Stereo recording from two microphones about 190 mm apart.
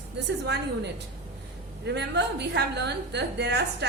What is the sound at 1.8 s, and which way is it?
A woman's voice, 65° right (ahead or behind).